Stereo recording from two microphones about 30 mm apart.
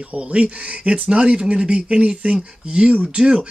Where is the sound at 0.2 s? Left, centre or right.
Right.